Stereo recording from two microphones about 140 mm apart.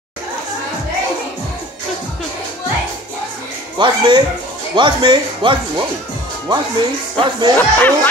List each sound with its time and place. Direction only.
3.7 s speech: 35° right (ahead or behind)
7.5 s speech: 15° left (ahead or behind)